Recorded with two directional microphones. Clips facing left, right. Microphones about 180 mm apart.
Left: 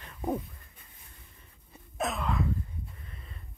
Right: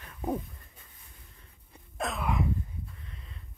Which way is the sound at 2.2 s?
15° right (ahead or behind).